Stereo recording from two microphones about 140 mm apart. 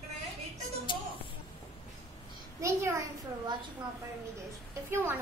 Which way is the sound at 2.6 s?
25° right (ahead or behind).